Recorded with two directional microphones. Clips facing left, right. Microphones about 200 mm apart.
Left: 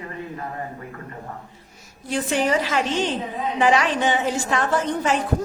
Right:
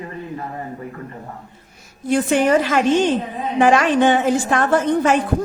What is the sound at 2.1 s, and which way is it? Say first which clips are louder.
A woman's voice: right 6 dB; 55° right (ahead or behind).